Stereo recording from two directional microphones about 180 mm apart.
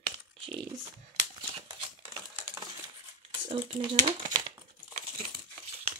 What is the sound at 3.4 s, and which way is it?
Speech, 35° right (ahead or behind).